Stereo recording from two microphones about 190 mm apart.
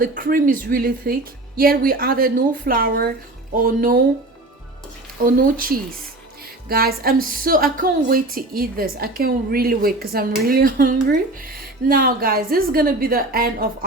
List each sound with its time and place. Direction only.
0.0 s speech: 45° right (ahead or behind)
5.2 s speech: 45° right (ahead or behind)